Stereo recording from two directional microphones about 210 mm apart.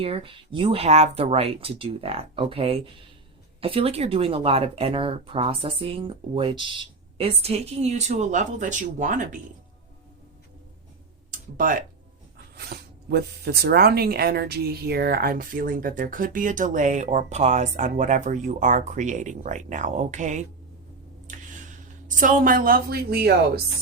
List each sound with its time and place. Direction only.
0.0 s speech: 25° right (ahead or behind)
11.3 s tick-tock: 40° right (ahead or behind)
12.5 s speech: 50° right (ahead or behind)
21.2 s a sound: 35° right (ahead or behind)